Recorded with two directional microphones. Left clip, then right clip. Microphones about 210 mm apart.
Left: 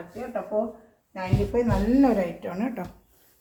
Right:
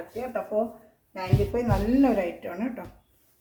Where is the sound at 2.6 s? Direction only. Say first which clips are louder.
Left 3 dB; 45° left (ahead or behind).